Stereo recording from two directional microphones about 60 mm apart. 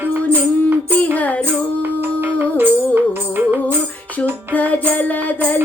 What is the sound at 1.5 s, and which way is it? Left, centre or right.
Music, right.